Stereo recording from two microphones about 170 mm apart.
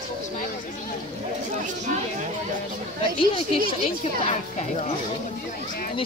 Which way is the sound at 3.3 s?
35° left (ahead or behind).